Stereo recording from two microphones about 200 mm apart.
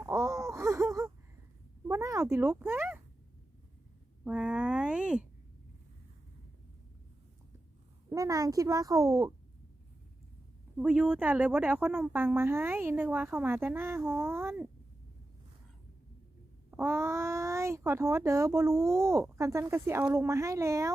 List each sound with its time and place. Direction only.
0.0 s wail: 15° right (ahead or behind)
1.9 s a sound: 15° right (ahead or behind)
4.2 s a sound: 5° right (ahead or behind)
8.1 s a woman's voice: 15° right (ahead or behind)
10.8 s a woman's voice: 5° right (ahead or behind)
16.7 s a child's voice: 10° right (ahead or behind)